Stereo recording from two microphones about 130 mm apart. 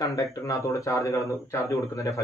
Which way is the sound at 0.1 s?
25° left (ahead or behind).